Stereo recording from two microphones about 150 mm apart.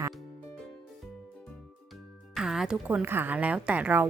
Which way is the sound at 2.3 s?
5° right (ahead or behind).